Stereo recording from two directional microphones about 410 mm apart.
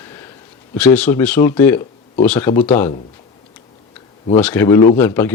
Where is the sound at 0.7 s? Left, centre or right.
Centre.